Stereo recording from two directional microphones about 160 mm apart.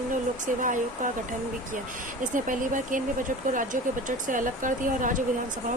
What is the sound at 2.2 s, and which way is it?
Speech, 55° right (ahead or behind).